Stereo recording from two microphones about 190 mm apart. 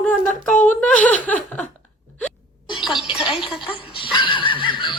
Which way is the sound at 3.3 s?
25° left (ahead or behind).